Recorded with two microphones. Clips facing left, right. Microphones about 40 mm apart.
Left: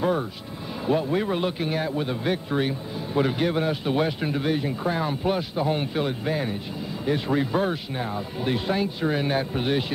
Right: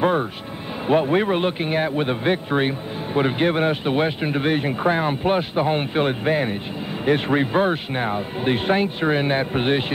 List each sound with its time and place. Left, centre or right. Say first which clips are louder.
0.0 s speech: right 4 dB; right